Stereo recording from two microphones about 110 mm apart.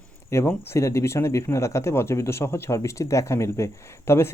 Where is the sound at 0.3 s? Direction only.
25° left (ahead or behind).